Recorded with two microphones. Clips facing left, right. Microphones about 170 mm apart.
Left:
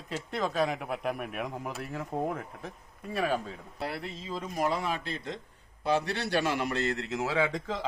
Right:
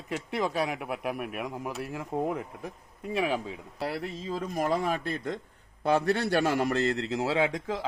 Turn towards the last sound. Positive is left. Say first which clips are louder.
# right 2 dB
turn(degrees=-10)  # may be behind; listen again after turning